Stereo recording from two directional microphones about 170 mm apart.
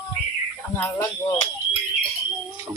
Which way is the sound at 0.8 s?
15° left (ahead or behind).